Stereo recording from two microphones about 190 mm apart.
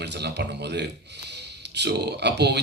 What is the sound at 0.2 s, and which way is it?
Speech, 60° right (ahead or behind).